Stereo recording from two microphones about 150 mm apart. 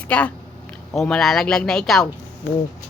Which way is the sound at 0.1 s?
10° left (ahead or behind).